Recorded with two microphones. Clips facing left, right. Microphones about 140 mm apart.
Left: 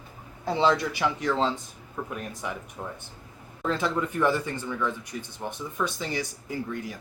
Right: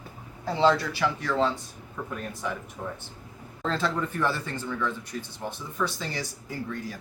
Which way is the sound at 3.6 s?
15° left (ahead or behind).